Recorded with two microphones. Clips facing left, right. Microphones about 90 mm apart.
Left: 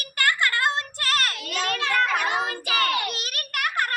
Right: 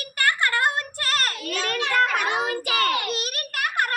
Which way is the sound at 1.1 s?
35° right (ahead or behind).